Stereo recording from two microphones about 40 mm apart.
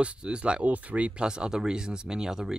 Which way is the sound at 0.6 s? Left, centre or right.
Right.